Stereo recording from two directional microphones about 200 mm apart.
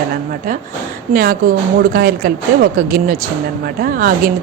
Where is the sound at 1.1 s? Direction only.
45° right (ahead or behind).